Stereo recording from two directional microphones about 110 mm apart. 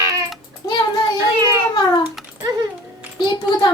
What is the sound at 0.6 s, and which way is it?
Child singing, 35° left (ahead or behind).